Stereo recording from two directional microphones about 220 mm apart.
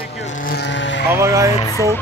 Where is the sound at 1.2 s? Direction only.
15° right (ahead or behind).